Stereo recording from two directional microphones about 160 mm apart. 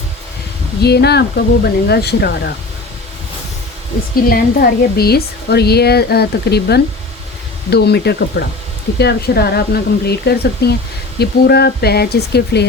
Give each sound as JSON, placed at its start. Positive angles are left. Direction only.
{"t": 0.8, "sound": "speech", "side_deg": 90}
{"t": 4.1, "sound": "speech", "side_deg": 70}